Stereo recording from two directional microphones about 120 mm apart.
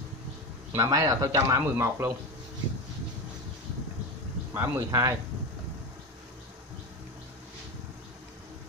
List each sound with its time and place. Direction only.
0.7 s speech: 25° right (ahead or behind)
4.6 s speech: 20° right (ahead or behind)